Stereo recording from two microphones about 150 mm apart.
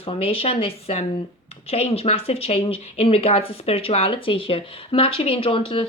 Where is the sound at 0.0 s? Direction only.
40° left (ahead or behind).